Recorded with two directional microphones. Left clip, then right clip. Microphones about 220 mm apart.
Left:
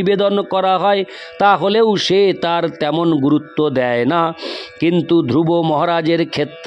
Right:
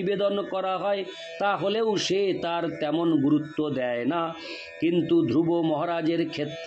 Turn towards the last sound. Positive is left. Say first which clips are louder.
# left 10 dB
turn(degrees=50)  # may be behind; listen again after turning